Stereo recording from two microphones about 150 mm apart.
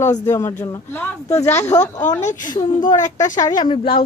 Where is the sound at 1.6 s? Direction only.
45° left (ahead or behind).